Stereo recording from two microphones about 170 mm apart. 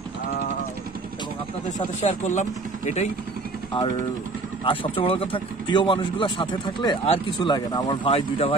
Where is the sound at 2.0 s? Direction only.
45° left (ahead or behind).